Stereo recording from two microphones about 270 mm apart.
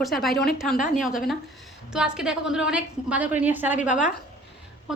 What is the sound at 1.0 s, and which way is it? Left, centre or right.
A woman's voice, centre.